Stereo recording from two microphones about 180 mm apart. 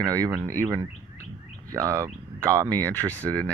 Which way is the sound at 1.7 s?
15° right (ahead or behind).